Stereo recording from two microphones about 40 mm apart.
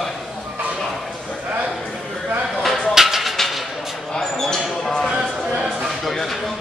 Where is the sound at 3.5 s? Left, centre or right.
Centre.